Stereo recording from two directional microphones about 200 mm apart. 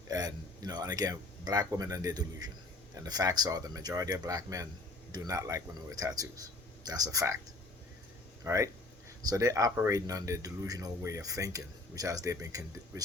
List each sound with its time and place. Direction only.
0.1 s speech: 20° right (ahead or behind)
8.4 s speech: 15° right (ahead or behind)